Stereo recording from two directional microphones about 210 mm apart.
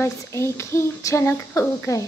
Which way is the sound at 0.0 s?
10° left (ahead or behind).